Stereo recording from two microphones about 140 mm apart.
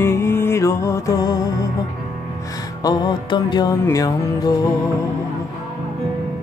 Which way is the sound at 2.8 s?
30° left (ahead or behind).